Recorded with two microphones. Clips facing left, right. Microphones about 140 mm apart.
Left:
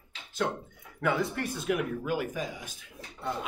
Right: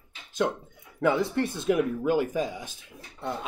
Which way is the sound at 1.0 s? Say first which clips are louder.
Right 5 dB; 25° right (ahead or behind).